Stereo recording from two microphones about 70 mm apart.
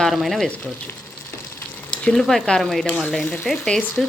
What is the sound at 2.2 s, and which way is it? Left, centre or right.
Speech, centre.